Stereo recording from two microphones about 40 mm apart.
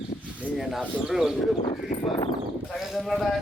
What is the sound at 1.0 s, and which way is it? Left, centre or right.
Speech, centre.